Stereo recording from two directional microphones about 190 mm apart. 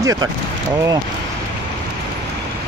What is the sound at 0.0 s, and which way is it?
Speech, 15° right (ahead or behind).